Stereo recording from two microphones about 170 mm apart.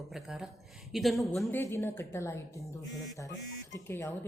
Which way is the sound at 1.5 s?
15° left (ahead or behind).